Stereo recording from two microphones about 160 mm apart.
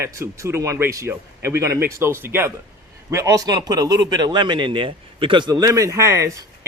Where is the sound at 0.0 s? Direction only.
20° right (ahead or behind).